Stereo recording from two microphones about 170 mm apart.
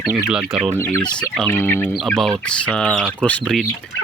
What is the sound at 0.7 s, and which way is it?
Speech, 15° left (ahead or behind).